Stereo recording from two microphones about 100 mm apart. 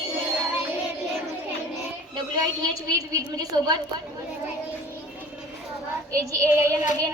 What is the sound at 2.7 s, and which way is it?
Child singing, 35° right (ahead or behind).